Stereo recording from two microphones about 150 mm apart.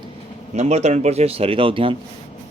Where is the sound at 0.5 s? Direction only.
45° right (ahead or behind).